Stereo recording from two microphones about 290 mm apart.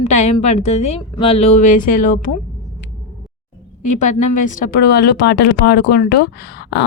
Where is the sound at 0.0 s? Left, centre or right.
Left.